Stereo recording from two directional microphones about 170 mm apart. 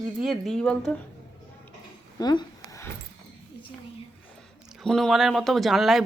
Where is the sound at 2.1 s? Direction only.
20° left (ahead or behind).